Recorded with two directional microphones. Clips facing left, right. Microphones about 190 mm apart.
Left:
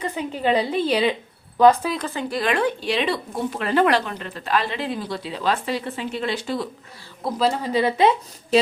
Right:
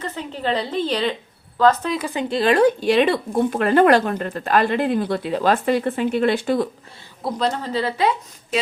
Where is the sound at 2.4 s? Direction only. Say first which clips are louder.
Right 7 dB; 35° right (ahead or behind).